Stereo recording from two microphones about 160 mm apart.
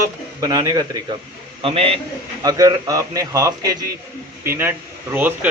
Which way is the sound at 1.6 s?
35° right (ahead or behind).